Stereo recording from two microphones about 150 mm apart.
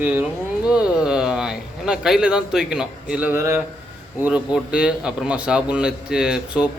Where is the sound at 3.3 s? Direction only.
20° right (ahead or behind).